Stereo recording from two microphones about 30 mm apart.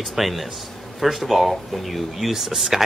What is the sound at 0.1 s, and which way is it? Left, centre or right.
Speech, centre.